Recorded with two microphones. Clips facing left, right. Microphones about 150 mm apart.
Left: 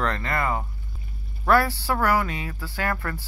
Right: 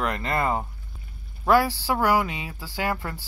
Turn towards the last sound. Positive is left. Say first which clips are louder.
# even
turn(degrees=-15)  # may be behind; listen again after turning